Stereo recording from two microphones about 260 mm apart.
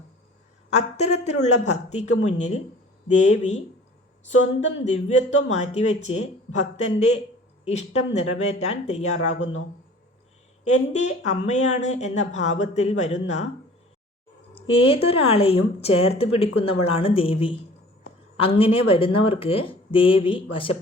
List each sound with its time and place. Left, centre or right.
0.7 s speech: left
3.2 s speech: left
4.8 s speech: left
9.4 s a man's voice: left
10.6 s speech: left
14.5 s speech: left